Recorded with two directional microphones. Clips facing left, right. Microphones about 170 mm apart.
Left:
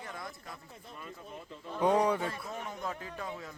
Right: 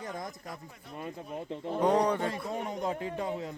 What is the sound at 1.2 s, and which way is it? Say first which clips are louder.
Speech: right 8 dB; 65° right (ahead or behind).